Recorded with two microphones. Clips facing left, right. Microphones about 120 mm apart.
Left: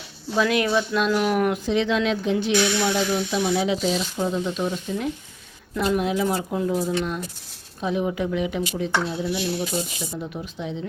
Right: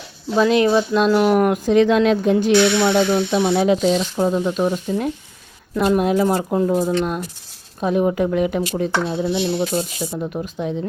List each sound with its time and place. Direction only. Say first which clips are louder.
0.4 s speech: right 8 dB; 25° right (ahead or behind)
0.7 s speech: right 6 dB; 40° right (ahead or behind)
2.5 s speech: right 7 dB; 70° right (ahead or behind); by 8.9 s 50° right (ahead or behind)
9.0 s speech: right 5 dB; 30° right (ahead or behind)
9.6 s speech: right 6 dB; 55° right (ahead or behind)